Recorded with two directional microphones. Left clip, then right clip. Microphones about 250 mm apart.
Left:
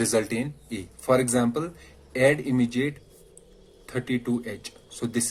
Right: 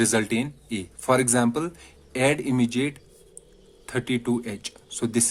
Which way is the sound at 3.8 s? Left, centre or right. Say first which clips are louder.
Right 2 dB; right.